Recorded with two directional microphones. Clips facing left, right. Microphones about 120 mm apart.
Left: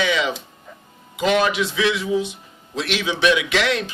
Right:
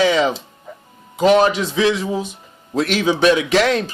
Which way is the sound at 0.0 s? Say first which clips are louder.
Right 6 dB; 40° right (ahead or behind).